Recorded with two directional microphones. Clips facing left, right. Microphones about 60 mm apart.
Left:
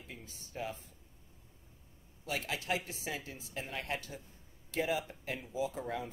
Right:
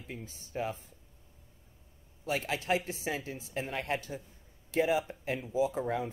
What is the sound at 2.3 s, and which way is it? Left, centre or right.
Speech, right.